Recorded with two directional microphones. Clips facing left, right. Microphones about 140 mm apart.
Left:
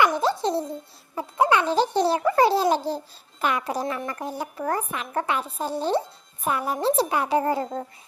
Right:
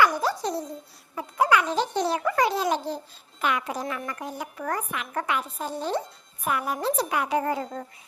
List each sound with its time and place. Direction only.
0.0 s music: 25° left (ahead or behind)
1.1 s speech: 25° left (ahead or behind)